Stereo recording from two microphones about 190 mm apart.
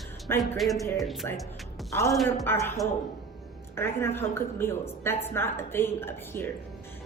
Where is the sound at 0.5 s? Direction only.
Centre (ahead or behind).